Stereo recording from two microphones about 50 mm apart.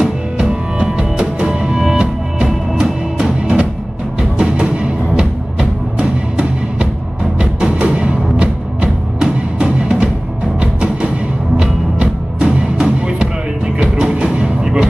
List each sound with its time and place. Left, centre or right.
0.0 s music: centre
4.2 s music: centre